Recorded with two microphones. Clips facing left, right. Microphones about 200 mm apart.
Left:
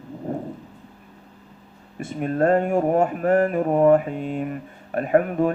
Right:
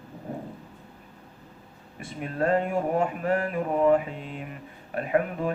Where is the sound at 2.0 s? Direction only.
45° left (ahead or behind).